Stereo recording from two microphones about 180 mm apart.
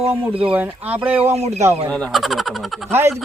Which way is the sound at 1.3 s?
35° right (ahead or behind).